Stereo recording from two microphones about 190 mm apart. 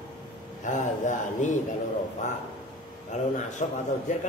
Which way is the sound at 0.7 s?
40° left (ahead or behind).